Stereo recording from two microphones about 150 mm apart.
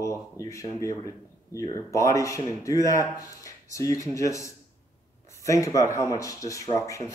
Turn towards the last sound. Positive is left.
turn(degrees=20)  # may be behind; listen again after turning